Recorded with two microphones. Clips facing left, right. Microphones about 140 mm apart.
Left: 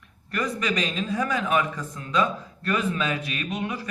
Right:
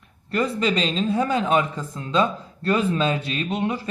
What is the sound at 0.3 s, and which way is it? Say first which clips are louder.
A man's voice: right 5 dB; 30° right (ahead or behind).